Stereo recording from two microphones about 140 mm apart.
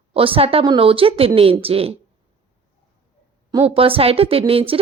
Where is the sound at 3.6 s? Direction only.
40° right (ahead or behind).